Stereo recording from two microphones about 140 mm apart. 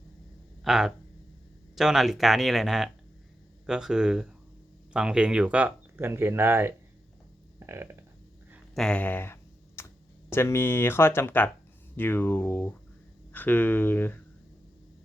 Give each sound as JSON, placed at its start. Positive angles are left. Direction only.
{"t": 0.6, "sound": "speech", "side_deg": 0}
{"t": 8.7, "sound": "a sound", "side_deg": 5}
{"t": 10.3, "sound": "speech", "side_deg": 20}